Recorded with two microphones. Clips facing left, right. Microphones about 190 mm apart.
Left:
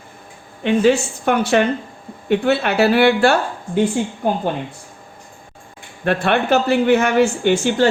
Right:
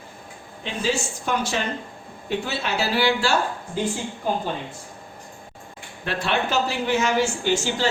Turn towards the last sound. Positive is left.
turn(degrees=55)  # may be behind; listen again after turning